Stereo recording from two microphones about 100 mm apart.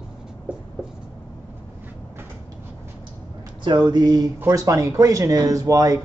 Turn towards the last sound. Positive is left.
turn(degrees=-35)  # may be behind; listen again after turning